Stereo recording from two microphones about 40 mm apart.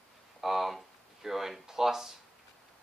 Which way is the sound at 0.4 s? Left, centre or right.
Centre.